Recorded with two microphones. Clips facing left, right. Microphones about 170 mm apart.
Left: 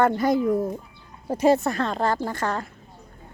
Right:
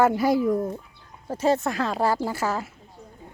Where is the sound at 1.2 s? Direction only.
15° left (ahead or behind).